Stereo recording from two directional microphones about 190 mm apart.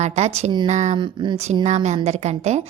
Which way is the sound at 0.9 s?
25° right (ahead or behind).